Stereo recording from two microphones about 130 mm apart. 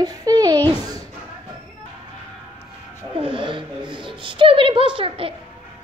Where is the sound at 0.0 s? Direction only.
30° right (ahead or behind).